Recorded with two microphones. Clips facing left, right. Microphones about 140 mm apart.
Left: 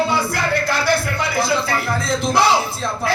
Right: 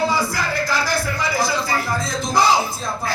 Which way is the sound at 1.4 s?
65° left (ahead or behind).